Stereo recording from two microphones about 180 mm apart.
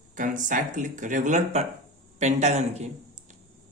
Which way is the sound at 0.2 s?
45° right (ahead or behind).